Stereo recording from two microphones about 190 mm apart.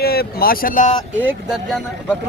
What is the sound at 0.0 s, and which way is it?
Speech, 55° left (ahead or behind).